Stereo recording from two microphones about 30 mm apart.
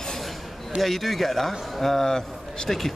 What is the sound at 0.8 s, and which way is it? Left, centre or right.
A man's voice, centre.